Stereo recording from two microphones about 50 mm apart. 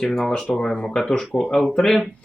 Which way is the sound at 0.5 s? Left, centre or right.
Centre.